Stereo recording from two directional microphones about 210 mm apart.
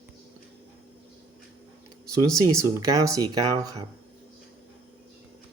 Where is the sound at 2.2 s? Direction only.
15° right (ahead or behind).